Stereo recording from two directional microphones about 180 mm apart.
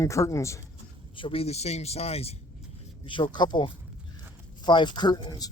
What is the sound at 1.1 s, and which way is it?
Speech, 30° left (ahead or behind).